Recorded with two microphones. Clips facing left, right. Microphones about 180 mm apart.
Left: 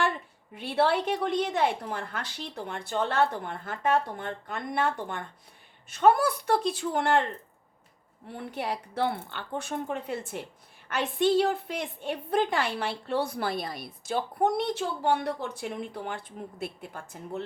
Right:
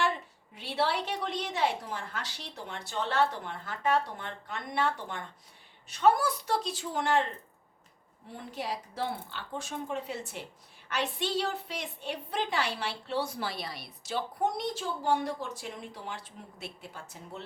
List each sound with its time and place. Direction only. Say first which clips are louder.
0.5 s a woman's voice: left 5 dB; 55° left (ahead or behind)
8.4 s a woman's voice: left 3 dB; 60° left (ahead or behind)